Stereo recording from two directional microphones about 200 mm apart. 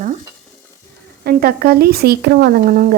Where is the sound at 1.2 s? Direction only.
50° right (ahead or behind).